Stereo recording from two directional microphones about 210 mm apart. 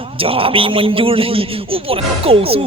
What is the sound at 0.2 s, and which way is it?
A man's voice, 25° right (ahead or behind).